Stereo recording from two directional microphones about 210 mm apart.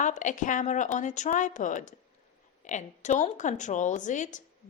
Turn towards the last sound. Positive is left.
turn(degrees=35)  # may be behind; listen again after turning